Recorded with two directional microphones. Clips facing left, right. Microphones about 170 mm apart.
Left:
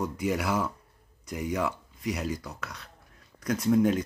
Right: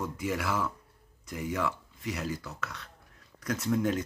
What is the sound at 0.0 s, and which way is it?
Speech, 20° left (ahead or behind).